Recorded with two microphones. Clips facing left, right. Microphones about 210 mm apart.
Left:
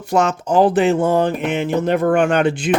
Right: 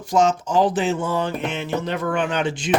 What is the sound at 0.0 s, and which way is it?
Speech, 60° left (ahead or behind).